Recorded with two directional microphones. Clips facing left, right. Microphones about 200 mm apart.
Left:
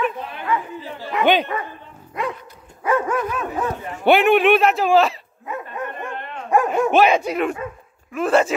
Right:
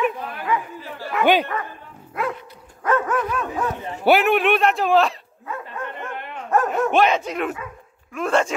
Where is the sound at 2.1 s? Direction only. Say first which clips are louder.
Even; centre (ahead or behind).